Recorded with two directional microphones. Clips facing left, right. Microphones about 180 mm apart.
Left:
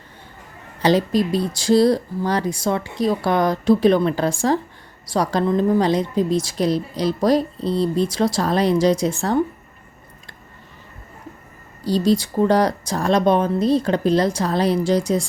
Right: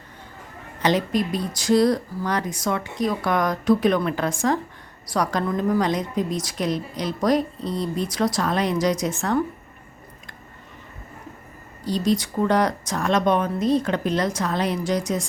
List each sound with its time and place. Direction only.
0.8 s a woman's voice: 35° left (ahead or behind)
11.8 s a woman's voice: 35° left (ahead or behind)